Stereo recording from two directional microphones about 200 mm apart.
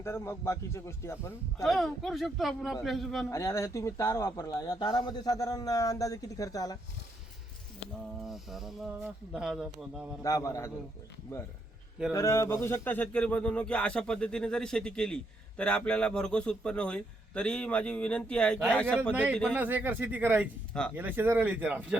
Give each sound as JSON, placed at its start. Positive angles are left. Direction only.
{"t": 0.0, "sound": "speech", "side_deg": 15}
{"t": 1.6, "sound": "speech", "side_deg": 0}
{"t": 3.2, "sound": "speech", "side_deg": 15}
{"t": 8.2, "sound": "speech", "side_deg": 0}
{"t": 10.2, "sound": "speech", "side_deg": 15}
{"t": 12.1, "sound": "speech", "side_deg": 15}
{"t": 19.1, "sound": "speech", "side_deg": -5}